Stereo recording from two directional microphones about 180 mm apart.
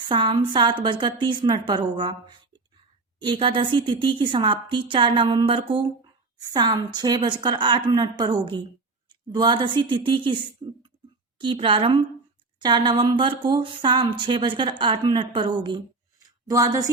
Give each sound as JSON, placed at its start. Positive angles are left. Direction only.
{"t": 0.1, "sound": "speech", "side_deg": -25}